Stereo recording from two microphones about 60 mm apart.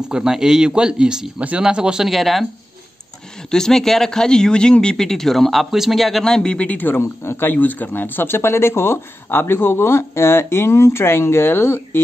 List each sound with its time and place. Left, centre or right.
0.0 s speech: centre
2.0 s speech: centre
3.4 s speech: centre
7.0 s speech: left
7.4 s speech: left